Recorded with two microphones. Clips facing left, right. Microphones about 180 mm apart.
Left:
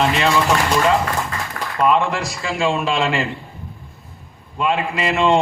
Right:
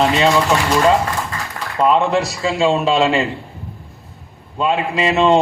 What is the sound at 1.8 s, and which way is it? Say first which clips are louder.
A man's voice: right 3 dB; 25° right (ahead or behind).